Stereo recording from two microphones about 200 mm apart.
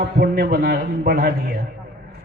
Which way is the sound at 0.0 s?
55° right (ahead or behind).